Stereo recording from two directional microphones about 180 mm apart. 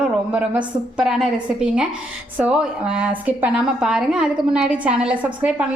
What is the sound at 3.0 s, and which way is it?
A woman's voice, 10° right (ahead or behind).